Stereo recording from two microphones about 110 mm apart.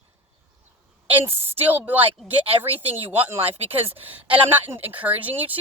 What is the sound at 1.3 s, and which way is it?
Speech, 65° right (ahead or behind).